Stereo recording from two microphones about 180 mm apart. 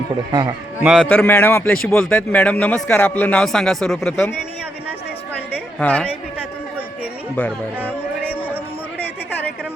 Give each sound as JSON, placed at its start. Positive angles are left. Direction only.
{"t": 0.3, "sound": "a man's voice", "side_deg": -25}
{"t": 0.8, "sound": "a man's voice", "side_deg": -5}
{"t": 1.0, "sound": "a man's voice", "side_deg": 10}
{"t": 5.8, "sound": "a man's voice", "side_deg": 10}
{"t": 7.8, "sound": "music", "side_deg": -10}